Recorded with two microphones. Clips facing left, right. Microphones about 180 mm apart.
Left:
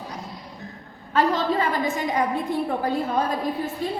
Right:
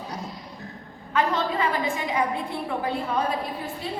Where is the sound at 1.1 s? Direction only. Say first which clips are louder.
Left 3 dB; 40° left (ahead or behind).